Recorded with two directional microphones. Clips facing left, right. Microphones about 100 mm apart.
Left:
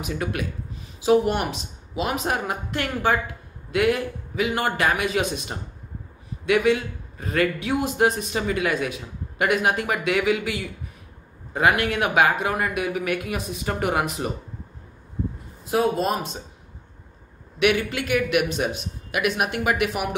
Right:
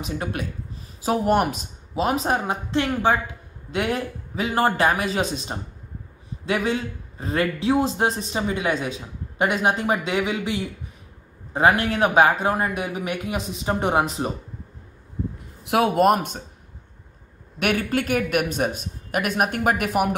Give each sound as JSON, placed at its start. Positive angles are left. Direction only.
{"t": 0.0, "sound": "a woman's voice", "side_deg": -30}
{"t": 1.0, "sound": "speech", "side_deg": -45}
{"t": 2.0, "sound": "a woman's voice", "side_deg": -30}
{"t": 15.6, "sound": "speech", "side_deg": -75}
{"t": 17.6, "sound": "a man's voice", "side_deg": -45}